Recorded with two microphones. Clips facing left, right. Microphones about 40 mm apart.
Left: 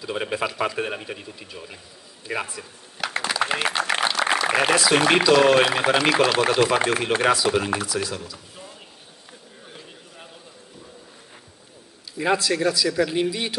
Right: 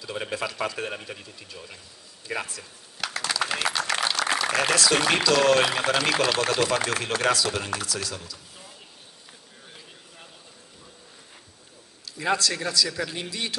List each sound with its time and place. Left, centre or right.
0.0 s speech: centre
3.3 s a sound: left
4.5 s speech: left
12.2 s speech: centre